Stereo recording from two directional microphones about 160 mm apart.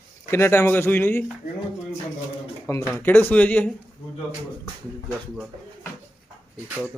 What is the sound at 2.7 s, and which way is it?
Speech, 15° left (ahead or behind).